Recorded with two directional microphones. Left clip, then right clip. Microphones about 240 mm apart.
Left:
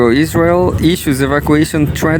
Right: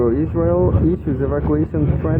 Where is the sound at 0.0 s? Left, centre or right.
Left.